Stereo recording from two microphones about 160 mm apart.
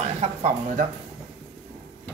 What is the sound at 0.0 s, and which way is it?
Speech, 45° right (ahead or behind).